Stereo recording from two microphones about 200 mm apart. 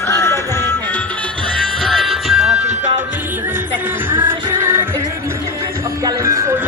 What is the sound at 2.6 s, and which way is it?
Music, 35° right (ahead or behind).